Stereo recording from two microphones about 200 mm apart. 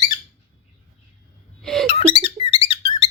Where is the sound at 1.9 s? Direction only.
25° left (ahead or behind).